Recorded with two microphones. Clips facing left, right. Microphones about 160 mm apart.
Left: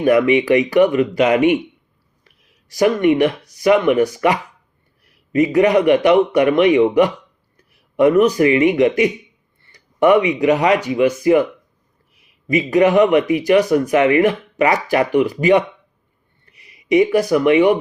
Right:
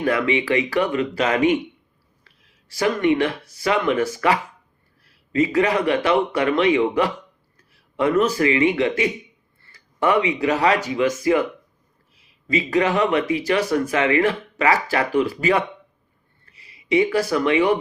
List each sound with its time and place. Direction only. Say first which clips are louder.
0.0 s speech: left 7 dB; 15° left (ahead or behind)
2.7 s a man's voice: left 5 dB; 15° left (ahead or behind)
9.6 s a sound: left 7 dB; 20° left (ahead or behind)
10.3 s speech: left 4 dB; 15° left (ahead or behind)
12.5 s speech: left 6 dB; 15° left (ahead or behind)